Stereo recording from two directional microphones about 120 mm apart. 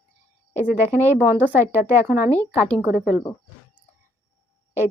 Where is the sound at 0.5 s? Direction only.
15° right (ahead or behind).